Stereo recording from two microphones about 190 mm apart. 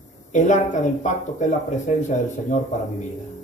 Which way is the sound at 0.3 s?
40° left (ahead or behind).